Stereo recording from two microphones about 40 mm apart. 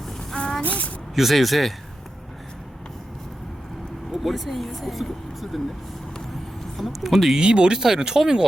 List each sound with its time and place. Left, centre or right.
0.3 s a sound: centre
0.6 s speech: left
1.1 s speech: centre
4.1 s speech: centre
6.7 s speech: centre
7.3 s speech: right